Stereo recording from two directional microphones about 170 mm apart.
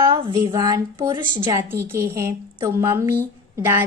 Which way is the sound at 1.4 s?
15° right (ahead or behind).